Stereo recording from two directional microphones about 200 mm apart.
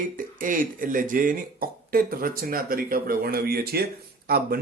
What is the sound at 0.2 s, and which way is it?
Speech, 40° right (ahead or behind).